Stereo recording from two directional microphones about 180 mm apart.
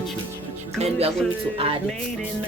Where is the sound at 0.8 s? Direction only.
35° right (ahead or behind).